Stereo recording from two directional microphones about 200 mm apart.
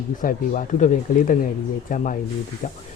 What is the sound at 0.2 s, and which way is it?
Speech, 40° left (ahead or behind).